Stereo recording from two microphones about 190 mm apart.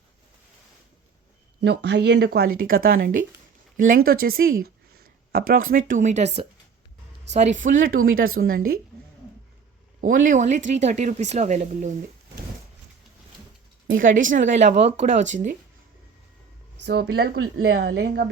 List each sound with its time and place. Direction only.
1.6 s speech: 65° right (ahead or behind); by 7.7 s 40° right (ahead or behind)
7.9 s speech: 90° right
8.4 s speech: 50° right (ahead or behind)
10.0 s speech: 45° right (ahead or behind)
13.9 s speech: 45° right (ahead or behind)
16.8 s speech: 60° right (ahead or behind)
17.3 s speech: 90° right
17.7 s speech: 55° right (ahead or behind)